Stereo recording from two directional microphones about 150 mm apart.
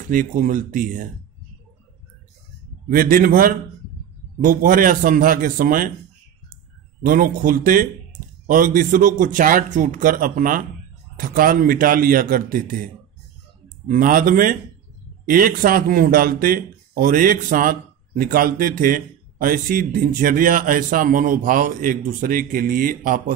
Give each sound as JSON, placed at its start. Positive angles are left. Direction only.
{"t": 0.1, "sound": "a man's voice", "side_deg": -60}
{"t": 2.9, "sound": "a man's voice", "side_deg": -70}